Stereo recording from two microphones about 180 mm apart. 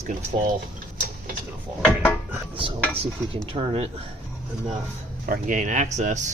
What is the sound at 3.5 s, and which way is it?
Speech, 35° right (ahead or behind).